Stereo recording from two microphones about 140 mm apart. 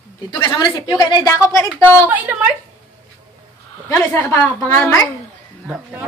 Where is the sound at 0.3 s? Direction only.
35° left (ahead or behind).